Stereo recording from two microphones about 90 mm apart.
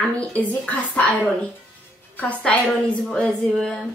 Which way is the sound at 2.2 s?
15° left (ahead or behind).